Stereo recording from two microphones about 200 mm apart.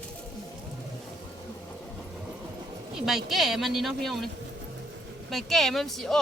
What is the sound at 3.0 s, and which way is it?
Speech, centre (ahead or behind).